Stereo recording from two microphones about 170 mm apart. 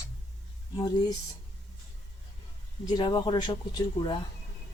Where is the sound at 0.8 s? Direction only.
25° left (ahead or behind).